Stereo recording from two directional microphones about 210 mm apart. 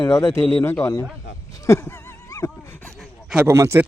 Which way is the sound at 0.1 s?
10° left (ahead or behind).